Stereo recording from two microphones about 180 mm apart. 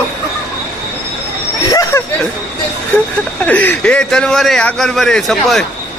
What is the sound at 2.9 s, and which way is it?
A man's voice, 5° left (ahead or behind).